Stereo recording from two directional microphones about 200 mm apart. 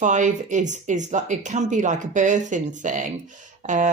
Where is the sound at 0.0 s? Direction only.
40° right (ahead or behind).